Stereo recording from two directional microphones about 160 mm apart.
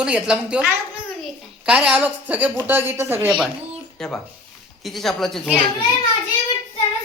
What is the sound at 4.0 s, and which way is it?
Speech, 5° left (ahead or behind).